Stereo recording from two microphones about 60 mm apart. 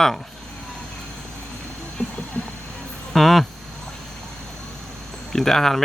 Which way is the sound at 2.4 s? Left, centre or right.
Left.